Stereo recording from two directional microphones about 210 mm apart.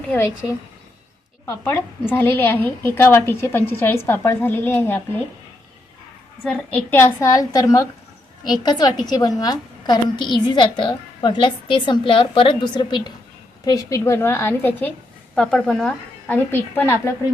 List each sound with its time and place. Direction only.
0.1 s a woman's voice: 10° left (ahead or behind)
6.4 s a woman's voice: 5° left (ahead or behind)